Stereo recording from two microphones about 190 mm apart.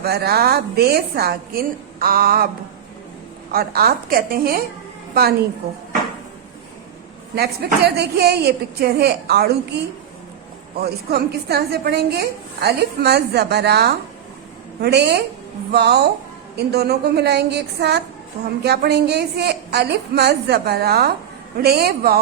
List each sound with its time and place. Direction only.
0.0 s a woman's voice: 55° right (ahead or behind)
3.5 s a woman's voice: 55° right (ahead or behind)
7.3 s a woman's voice: 55° right (ahead or behind)